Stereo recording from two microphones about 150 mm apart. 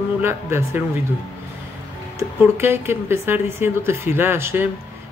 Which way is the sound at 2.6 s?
15° right (ahead or behind).